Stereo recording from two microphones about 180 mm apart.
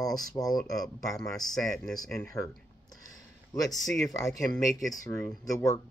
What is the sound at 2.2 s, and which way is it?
Speech, 15° left (ahead or behind).